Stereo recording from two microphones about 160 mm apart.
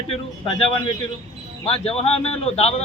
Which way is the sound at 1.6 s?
35° left (ahead or behind).